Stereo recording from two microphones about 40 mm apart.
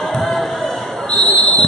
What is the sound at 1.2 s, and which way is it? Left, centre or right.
Basketball bounce, left.